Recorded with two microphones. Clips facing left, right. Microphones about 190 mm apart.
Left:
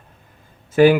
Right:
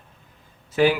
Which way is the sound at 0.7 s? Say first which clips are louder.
Left 7 dB; 50° left (ahead or behind).